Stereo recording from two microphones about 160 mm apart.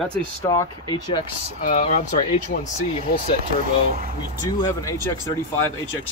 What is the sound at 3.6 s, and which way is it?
Speech, 60° right (ahead or behind).